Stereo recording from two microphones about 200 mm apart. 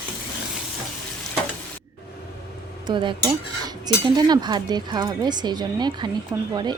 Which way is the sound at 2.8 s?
25° right (ahead or behind).